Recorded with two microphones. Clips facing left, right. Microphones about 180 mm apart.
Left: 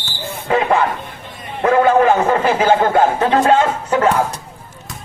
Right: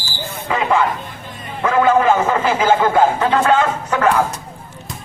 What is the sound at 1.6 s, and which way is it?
A man's voice, 55° left (ahead or behind).